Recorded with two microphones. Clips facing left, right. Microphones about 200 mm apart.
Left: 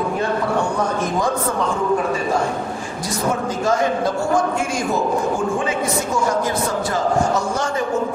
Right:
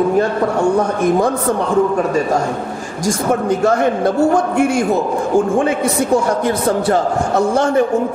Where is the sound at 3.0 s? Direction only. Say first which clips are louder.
Right 6 dB; 55° right (ahead or behind).